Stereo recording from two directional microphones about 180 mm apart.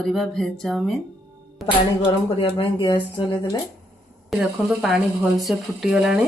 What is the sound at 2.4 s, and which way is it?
Speech, 25° left (ahead or behind).